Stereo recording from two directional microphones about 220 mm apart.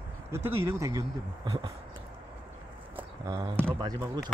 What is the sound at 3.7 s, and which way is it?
Speech, 15° right (ahead or behind).